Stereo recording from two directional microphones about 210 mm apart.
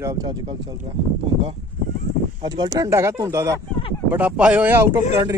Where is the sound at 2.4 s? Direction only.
20° right (ahead or behind).